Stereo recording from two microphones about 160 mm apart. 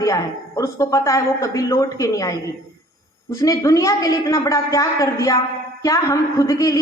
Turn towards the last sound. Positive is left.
turn(degrees=20)  # may be behind; listen again after turning